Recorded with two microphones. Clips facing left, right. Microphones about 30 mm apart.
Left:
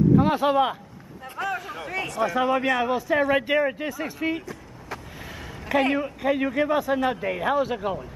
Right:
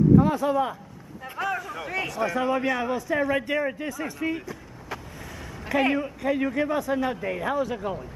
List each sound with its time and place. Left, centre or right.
0.1 s speech: left
1.3 s a sound: centre
1.8 s a man's voice: centre; by 4.4 s left
4.5 s vehicle: centre
5.7 s a woman's voice: centre
5.9 s a man's voice: centre